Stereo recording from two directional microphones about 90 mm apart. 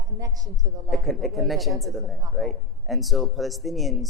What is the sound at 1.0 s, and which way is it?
Speech, centre (ahead or behind).